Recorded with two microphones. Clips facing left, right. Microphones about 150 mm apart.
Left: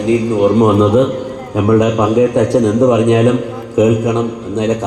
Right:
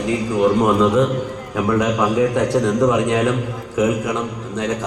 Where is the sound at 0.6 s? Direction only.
30° left (ahead or behind).